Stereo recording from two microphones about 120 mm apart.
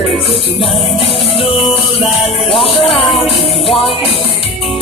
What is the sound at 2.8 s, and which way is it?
Music, 50° left (ahead or behind).